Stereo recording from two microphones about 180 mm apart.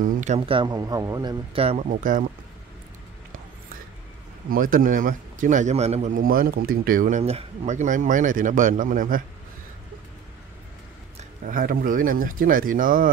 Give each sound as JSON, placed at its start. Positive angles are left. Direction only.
{"t": 0.0, "sound": "speech", "side_deg": -40}
{"t": 0.5, "sound": "a man's voice", "side_deg": -25}
{"t": 1.5, "sound": "speech", "side_deg": -35}
{"t": 1.9, "sound": "speech", "side_deg": -45}
{"t": 4.5, "sound": "speech", "side_deg": -50}
{"t": 11.4, "sound": "speech", "side_deg": -50}